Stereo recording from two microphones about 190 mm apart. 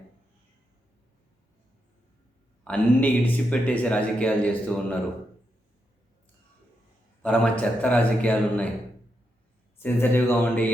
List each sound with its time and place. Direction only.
2.6 s speech: 5° left (ahead or behind)
7.2 s speech: 5° left (ahead or behind)
9.7 s speech: 10° left (ahead or behind)